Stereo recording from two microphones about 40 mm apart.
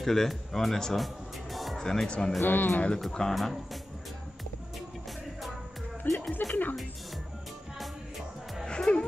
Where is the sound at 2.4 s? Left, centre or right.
Left.